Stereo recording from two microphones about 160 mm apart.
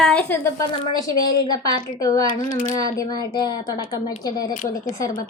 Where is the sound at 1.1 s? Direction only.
65° left (ahead or behind).